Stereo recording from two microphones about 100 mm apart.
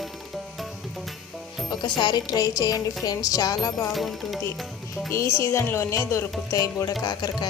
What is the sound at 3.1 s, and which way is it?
Music, 40° left (ahead or behind).